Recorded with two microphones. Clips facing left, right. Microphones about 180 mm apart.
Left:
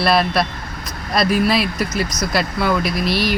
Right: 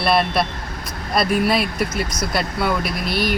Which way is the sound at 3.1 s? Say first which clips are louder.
Even; 50° right (ahead or behind).